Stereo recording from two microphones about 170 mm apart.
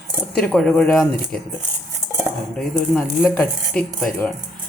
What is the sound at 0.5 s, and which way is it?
Speech, centre (ahead or behind).